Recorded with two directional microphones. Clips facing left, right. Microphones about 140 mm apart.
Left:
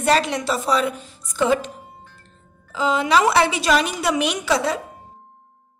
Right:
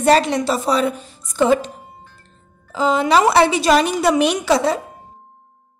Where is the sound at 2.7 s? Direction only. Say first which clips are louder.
Right 3 dB; 40° right (ahead or behind).